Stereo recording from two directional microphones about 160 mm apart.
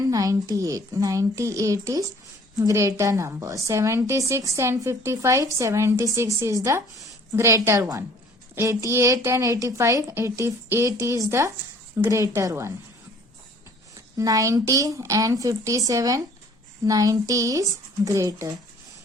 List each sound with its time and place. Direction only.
0.0 s a woman's voice: 20° right (ahead or behind)
14.2 s a woman's voice: 20° right (ahead or behind)